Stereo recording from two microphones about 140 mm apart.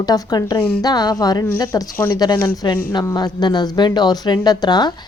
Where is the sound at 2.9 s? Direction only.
30° left (ahead or behind).